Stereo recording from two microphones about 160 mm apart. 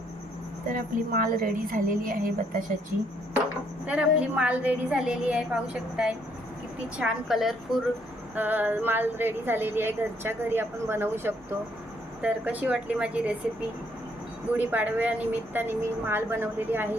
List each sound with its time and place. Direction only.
0.7 s a woman's voice: 60° right (ahead or behind)
3.8 s a woman's voice: 10° right (ahead or behind)
14.5 s speech: 10° right (ahead or behind)